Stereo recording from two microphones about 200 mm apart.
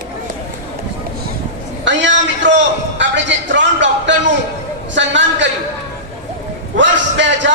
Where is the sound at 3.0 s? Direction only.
65° right (ahead or behind).